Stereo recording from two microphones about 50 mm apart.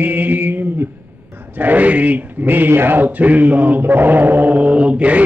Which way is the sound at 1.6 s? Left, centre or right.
Right.